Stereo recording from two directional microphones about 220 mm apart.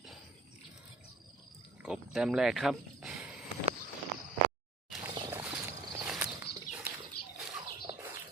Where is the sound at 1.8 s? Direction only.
5° right (ahead or behind).